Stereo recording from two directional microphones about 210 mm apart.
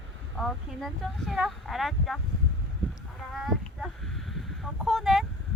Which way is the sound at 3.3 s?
Centre (ahead or behind).